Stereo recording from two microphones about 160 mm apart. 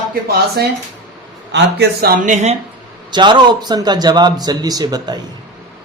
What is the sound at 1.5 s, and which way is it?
Speech, 90° right.